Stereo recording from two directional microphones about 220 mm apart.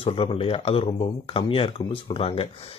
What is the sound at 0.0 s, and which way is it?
Speech, 25° left (ahead or behind).